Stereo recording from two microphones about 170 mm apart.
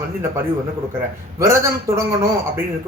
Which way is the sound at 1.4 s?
15° right (ahead or behind).